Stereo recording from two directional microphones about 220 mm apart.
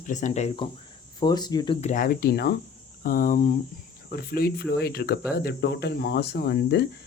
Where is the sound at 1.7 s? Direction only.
35° left (ahead or behind).